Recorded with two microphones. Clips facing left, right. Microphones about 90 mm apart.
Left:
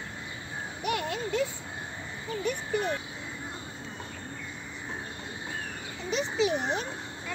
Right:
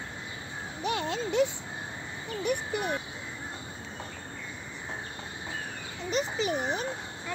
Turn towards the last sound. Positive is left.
turn(degrees=0)  # may be behind; listen again after turning